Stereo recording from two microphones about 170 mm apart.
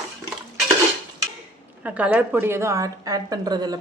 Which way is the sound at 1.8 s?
10° right (ahead or behind).